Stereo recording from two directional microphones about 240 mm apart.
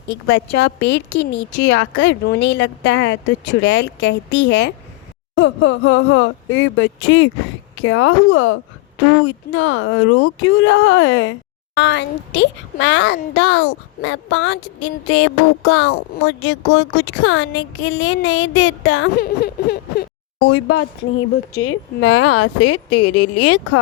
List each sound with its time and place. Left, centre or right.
0.1 s a woman's voice: left
20.5 s speech: left